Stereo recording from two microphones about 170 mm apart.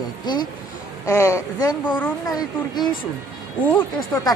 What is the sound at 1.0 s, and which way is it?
Speech, 15° left (ahead or behind).